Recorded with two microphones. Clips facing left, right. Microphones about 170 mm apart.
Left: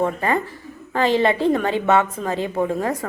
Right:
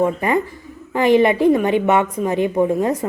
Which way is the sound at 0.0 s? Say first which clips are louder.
Right 3 dB; 15° right (ahead or behind).